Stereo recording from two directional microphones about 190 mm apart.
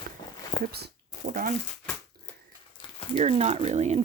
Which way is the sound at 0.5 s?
40° left (ahead or behind).